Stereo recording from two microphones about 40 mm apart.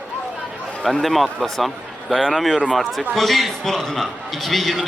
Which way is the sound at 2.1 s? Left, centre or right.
Centre.